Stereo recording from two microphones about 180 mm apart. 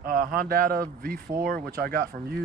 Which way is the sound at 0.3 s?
55° right (ahead or behind).